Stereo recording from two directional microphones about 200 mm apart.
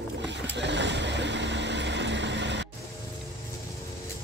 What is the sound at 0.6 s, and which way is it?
Vehicle, 60° right (ahead or behind).